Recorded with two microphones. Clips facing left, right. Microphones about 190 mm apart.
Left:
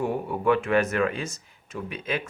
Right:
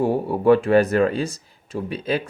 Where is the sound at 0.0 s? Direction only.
35° right (ahead or behind).